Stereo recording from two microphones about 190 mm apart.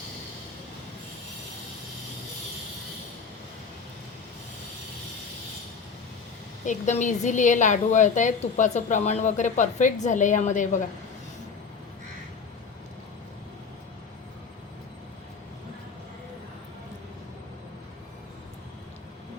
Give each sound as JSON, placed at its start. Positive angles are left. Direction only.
{"t": 6.7, "sound": "a woman's voice", "side_deg": 40}